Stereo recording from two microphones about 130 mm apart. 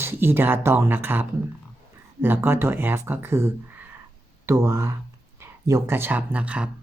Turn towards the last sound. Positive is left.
turn(degrees=-10)  # may be behind; listen again after turning